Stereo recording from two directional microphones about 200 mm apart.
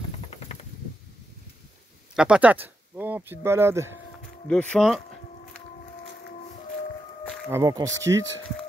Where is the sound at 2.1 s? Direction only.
5° right (ahead or behind).